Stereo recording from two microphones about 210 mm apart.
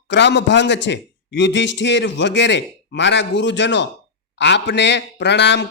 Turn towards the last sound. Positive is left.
turn(degrees=55)  # may be behind; listen again after turning